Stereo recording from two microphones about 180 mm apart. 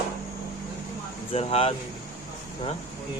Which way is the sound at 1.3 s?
35° left (ahead or behind).